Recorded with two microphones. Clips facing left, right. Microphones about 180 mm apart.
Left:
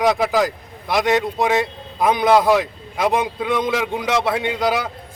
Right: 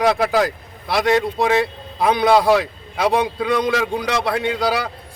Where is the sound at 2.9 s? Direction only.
Centre (ahead or behind).